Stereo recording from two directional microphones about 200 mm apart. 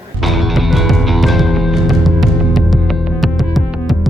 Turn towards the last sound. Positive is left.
turn(degrees=0)  # may be behind; listen again after turning